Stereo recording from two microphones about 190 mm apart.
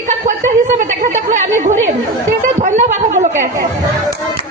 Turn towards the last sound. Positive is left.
turn(degrees=-40)  # may be behind; listen again after turning